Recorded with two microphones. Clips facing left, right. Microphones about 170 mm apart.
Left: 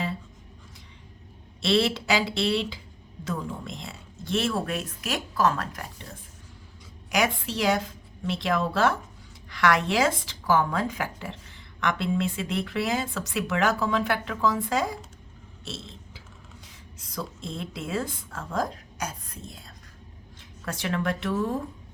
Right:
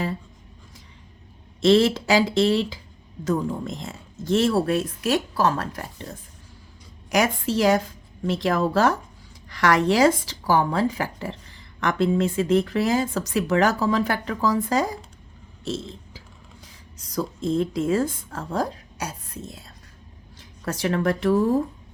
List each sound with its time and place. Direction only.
1.6 s speech: 40° right (ahead or behind)
15.6 s burping: 40° right (ahead or behind)
17.0 s speech: 40° right (ahead or behind)
20.4 s speech: 40° right (ahead or behind)